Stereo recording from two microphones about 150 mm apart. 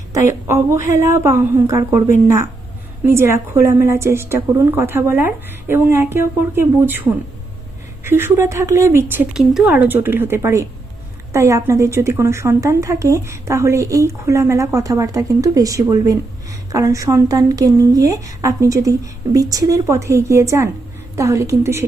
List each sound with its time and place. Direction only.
0.1 s a woman's voice: 20° right (ahead or behind)
9.4 s a woman's voice: centre (ahead or behind); by 21.8 s 20° right (ahead or behind)